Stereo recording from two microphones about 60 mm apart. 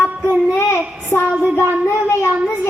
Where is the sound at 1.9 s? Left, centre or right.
Left.